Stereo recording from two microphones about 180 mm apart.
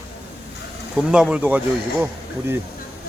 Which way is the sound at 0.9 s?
5° right (ahead or behind).